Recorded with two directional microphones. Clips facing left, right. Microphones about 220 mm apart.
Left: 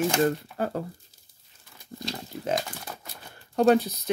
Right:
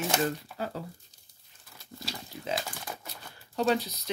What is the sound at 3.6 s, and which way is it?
Speech, 50° left (ahead or behind).